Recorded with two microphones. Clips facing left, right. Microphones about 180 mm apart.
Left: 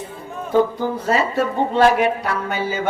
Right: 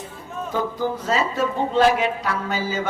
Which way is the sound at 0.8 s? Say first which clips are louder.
Left 3 dB; 60° left (ahead or behind).